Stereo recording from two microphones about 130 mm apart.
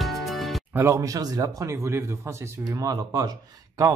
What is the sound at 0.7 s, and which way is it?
A man's voice, 20° right (ahead or behind).